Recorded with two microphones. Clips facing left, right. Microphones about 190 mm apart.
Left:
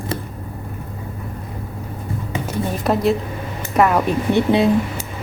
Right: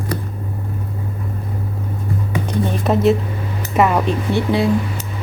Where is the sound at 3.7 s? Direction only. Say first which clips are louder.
Even; centre (ahead or behind).